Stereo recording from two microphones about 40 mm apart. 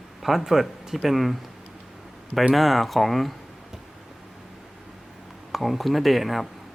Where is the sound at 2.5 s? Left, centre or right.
Centre.